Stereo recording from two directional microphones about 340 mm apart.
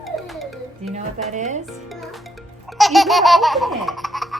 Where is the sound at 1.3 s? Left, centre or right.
Right.